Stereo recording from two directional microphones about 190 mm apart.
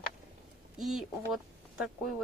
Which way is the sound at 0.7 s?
Centre (ahead or behind).